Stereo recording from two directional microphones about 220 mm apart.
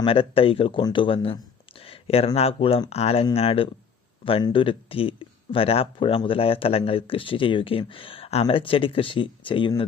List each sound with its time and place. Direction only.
0.0 s speech: 25° left (ahead or behind)